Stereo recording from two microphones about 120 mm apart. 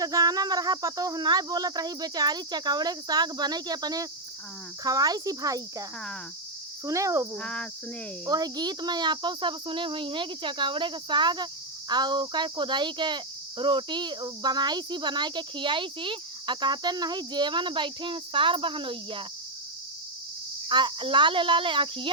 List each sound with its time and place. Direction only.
0.0 s speech: 30° right (ahead or behind)
6.8 s speech: 25° right (ahead or behind)
7.3 s speech: 10° left (ahead or behind)
8.3 s speech: 35° right (ahead or behind)
20.7 s speech: 40° right (ahead or behind)